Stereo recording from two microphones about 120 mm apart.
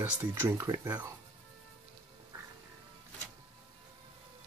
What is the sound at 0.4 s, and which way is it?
Speech, 25° right (ahead or behind).